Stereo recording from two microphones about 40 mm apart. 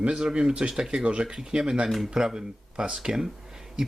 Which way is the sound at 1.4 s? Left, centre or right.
Centre.